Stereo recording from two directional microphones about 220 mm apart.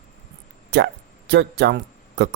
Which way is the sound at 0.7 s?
55° right (ahead or behind).